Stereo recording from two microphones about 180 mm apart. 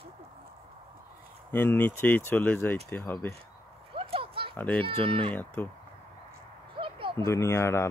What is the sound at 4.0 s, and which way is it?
Oink, 30° right (ahead or behind).